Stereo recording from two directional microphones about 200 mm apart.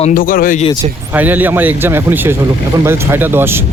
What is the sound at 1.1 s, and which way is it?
Speech, 10° right (ahead or behind).